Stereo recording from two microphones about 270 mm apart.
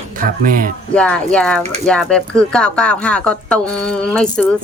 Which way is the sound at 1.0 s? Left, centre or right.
Centre.